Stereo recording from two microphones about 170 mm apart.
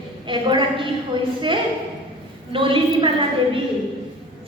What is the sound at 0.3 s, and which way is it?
A woman's voice, 30° right (ahead or behind).